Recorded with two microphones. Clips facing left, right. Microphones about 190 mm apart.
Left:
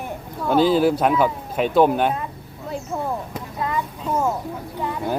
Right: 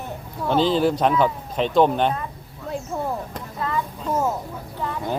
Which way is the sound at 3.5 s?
15° left (ahead or behind).